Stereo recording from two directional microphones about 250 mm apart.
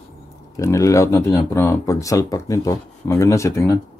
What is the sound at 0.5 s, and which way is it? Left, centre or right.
Speech, centre.